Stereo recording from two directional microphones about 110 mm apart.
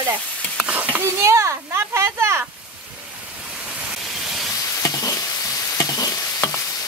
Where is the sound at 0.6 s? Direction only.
15° right (ahead or behind).